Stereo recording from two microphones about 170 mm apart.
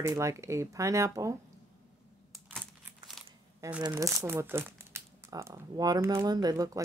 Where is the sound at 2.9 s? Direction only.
Centre (ahead or behind).